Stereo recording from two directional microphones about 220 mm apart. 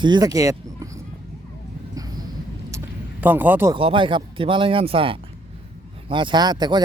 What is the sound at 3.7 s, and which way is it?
Speech, 25° right (ahead or behind).